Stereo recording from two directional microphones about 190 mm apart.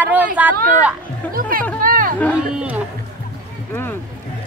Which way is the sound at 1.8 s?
45° right (ahead or behind).